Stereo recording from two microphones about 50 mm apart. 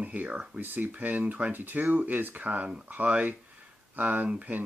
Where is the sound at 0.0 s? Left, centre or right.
Right.